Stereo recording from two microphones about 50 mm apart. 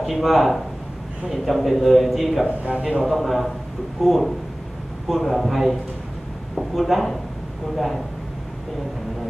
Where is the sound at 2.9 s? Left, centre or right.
Centre.